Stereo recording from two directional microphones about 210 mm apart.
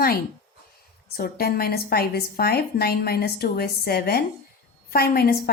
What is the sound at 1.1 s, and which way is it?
A woman's voice, 45° left (ahead or behind).